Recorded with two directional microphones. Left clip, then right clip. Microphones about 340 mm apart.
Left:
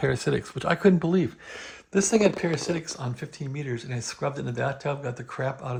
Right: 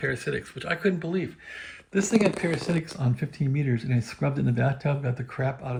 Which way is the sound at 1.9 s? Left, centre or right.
Centre.